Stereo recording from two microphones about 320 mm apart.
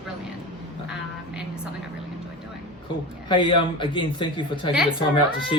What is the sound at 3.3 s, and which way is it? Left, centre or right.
Speech, centre.